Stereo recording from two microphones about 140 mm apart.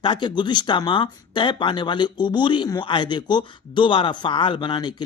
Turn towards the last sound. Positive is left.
turn(degrees=30)  # may be behind; listen again after turning